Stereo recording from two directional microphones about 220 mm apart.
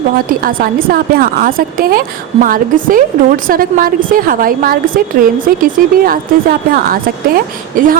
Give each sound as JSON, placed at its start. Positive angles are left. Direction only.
{"t": 0.4, "sound": "a woman's voice", "side_deg": -40}